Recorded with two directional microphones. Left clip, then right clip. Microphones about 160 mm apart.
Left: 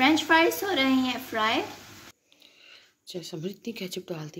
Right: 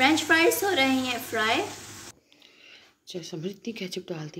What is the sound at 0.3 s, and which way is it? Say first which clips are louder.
A woman's voice: even; 55° left (ahead or behind).